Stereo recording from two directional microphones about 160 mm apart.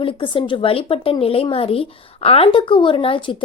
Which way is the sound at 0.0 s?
30° left (ahead or behind).